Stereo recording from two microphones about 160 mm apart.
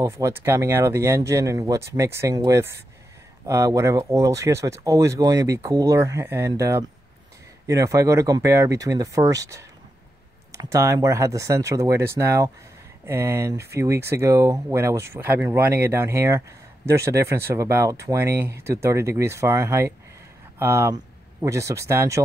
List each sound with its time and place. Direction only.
0.0 s speech: 15° right (ahead or behind)